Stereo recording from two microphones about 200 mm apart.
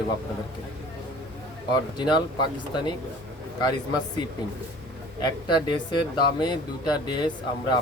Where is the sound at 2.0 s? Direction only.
20° left (ahead or behind).